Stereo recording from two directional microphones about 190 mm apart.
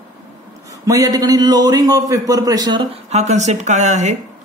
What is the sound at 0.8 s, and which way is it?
A man's voice, 20° right (ahead or behind).